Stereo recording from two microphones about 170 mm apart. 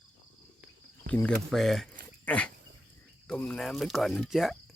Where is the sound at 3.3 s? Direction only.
5° left (ahead or behind).